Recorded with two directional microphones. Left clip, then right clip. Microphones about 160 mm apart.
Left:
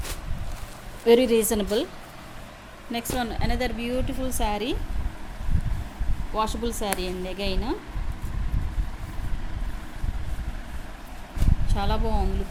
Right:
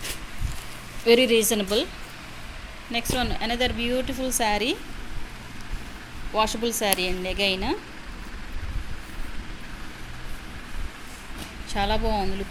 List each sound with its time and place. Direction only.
1.0 s a woman's voice: 20° left (ahead or behind)
2.9 s speech: 25° left (ahead or behind); by 4.8 s centre (ahead or behind)
6.3 s speech: centre (ahead or behind)
11.7 s speech: centre (ahead or behind)